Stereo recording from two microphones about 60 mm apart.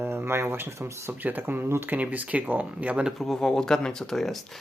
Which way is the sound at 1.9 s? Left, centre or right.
Right.